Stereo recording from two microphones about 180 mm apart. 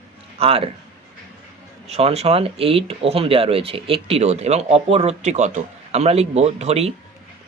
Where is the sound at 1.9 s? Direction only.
35° right (ahead or behind).